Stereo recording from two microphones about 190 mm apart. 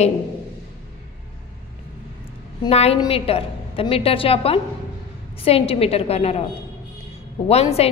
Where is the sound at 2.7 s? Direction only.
35° left (ahead or behind).